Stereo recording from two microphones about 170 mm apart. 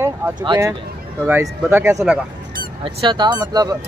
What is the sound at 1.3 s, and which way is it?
Speech, 10° right (ahead or behind).